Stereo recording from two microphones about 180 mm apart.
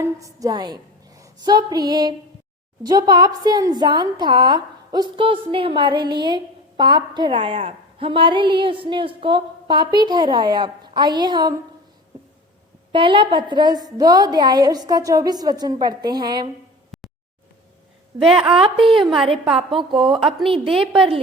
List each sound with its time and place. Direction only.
0.0 s a woman's voice: 20° right (ahead or behind)
12.9 s a woman's voice: 25° right (ahead or behind)
16.9 s a sound: centre (ahead or behind)
18.2 s a woman's voice: centre (ahead or behind)
19.7 s a woman's voice: 30° right (ahead or behind)
20.7 s a woman's voice: centre (ahead or behind)